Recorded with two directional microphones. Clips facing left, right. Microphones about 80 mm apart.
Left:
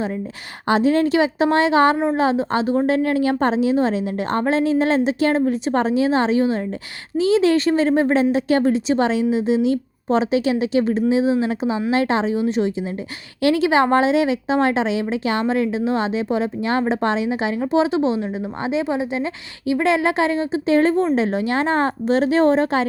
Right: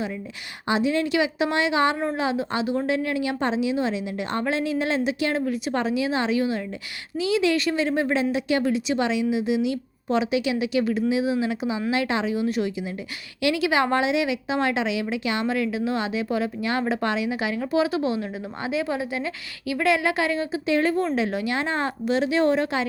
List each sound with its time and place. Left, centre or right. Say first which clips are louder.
0.7 s a woman's voice: left 6 dB; left